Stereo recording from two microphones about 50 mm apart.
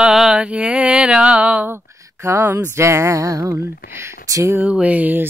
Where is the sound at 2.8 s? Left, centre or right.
Right.